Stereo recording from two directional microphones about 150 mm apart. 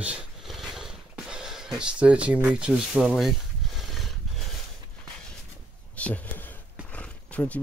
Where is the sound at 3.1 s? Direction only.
Centre (ahead or behind).